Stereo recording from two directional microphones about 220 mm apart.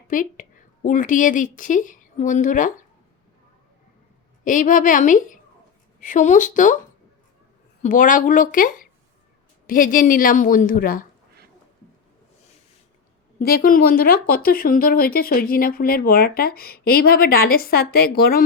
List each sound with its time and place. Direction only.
0.1 s a woman's voice: 35° left (ahead or behind)
4.4 s a woman's voice: 35° left (ahead or behind)
7.8 s a woman's voice: 35° left (ahead or behind)
13.4 s speech: 40° left (ahead or behind)